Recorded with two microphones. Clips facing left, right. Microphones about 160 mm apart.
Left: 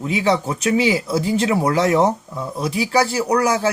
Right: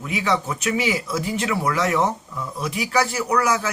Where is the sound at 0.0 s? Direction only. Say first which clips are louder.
Left 5 dB; 30° left (ahead or behind).